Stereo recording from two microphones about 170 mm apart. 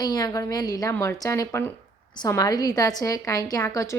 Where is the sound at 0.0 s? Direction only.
25° left (ahead or behind).